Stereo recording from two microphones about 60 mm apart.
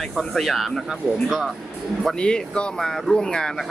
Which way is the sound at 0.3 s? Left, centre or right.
Centre.